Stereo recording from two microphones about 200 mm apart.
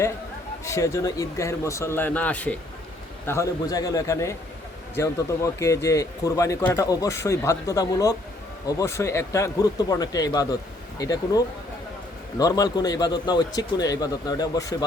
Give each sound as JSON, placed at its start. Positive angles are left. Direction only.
{"t": 0.6, "sound": "a man's voice", "side_deg": 15}